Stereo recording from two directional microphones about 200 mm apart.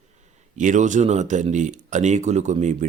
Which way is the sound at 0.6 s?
40° right (ahead or behind).